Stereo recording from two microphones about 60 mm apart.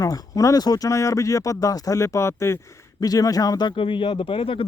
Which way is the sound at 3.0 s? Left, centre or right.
Left.